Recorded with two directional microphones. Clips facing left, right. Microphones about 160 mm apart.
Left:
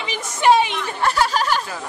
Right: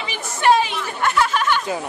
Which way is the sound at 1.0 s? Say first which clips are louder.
Even; 35° left (ahead or behind).